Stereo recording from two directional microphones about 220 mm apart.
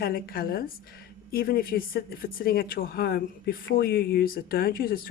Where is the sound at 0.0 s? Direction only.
40° left (ahead or behind).